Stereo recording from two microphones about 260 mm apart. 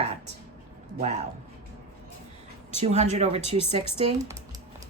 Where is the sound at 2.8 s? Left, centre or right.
Right.